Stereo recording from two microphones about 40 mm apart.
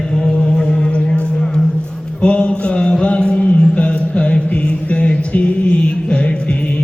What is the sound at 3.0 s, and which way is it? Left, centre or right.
Music, left.